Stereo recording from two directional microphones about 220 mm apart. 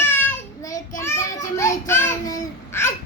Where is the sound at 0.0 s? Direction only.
10° left (ahead or behind).